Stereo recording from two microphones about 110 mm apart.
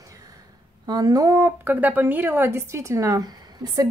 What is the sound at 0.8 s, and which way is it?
Speech, 35° right (ahead or behind).